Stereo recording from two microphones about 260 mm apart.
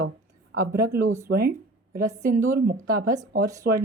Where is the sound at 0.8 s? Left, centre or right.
Right.